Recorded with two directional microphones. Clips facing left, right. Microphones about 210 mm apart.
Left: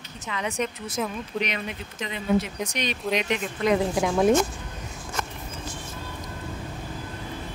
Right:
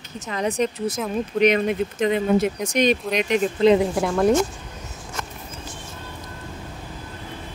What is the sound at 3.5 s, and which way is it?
Speech, 25° right (ahead or behind).